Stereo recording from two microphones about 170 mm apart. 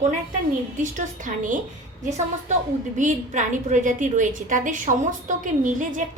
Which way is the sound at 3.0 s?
50° right (ahead or behind).